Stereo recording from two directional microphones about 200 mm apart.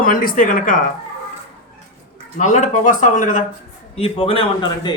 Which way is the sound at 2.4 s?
40° left (ahead or behind).